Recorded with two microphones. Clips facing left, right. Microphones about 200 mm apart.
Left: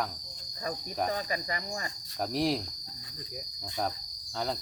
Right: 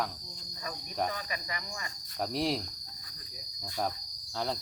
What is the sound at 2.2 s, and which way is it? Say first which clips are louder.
Cricket: left 2 dB; centre (ahead or behind).